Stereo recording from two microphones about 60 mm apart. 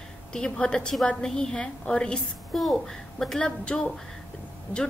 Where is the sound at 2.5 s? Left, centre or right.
Centre.